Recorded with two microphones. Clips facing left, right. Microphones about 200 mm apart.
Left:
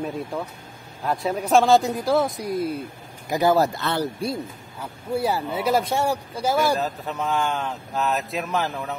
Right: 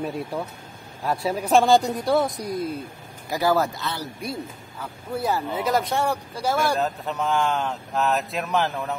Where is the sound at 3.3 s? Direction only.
20° left (ahead or behind).